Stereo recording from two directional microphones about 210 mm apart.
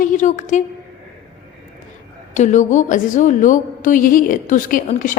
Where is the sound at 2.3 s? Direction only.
35° left (ahead or behind).